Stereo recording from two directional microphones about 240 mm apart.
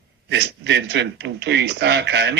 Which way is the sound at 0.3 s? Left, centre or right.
Right.